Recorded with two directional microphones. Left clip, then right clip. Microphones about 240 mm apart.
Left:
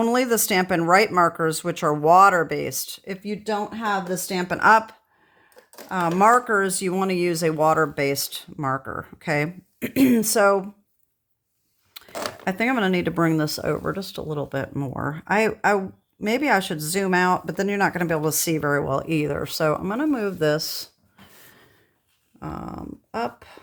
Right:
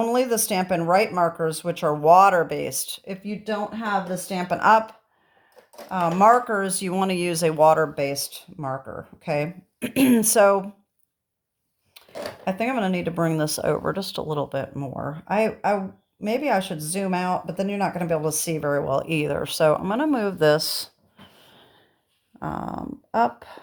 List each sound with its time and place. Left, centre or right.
0.0 s speech: left
6.5 s speech: left
8.6 s speech: left
9.2 s speech: left
12.5 s speech: left
22.4 s speech: left